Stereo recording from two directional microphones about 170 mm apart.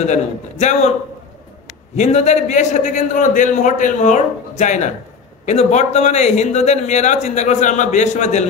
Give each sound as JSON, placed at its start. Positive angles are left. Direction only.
{"t": 0.0, "sound": "a man's voice", "side_deg": 40}
{"t": 2.0, "sound": "a man's voice", "side_deg": 40}